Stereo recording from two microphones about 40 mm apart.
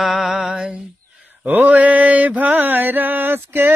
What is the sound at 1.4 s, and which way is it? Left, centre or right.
Mantra, right.